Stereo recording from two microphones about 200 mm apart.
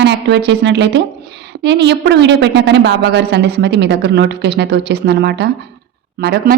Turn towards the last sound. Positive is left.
turn(degrees=-50)  # may be behind; listen again after turning